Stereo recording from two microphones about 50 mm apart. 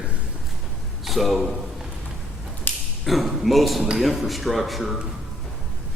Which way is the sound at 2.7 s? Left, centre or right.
Left.